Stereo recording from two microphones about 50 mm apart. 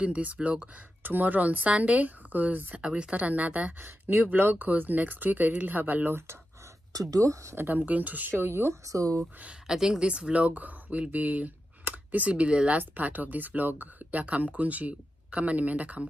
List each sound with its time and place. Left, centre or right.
0.0 s speech: right
2.8 s speech: right
4.1 s speech: right
7.5 s speech: right
8.3 s speech: right
8.8 s speech: right
9.7 s speech: centre; by 16.1 s right